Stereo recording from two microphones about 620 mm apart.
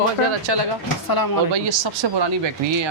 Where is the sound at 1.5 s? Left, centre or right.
Right.